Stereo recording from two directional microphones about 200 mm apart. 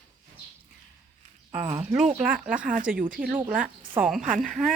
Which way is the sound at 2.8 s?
5° right (ahead or behind).